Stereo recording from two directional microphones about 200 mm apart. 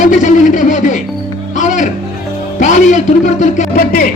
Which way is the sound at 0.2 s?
40° left (ahead or behind).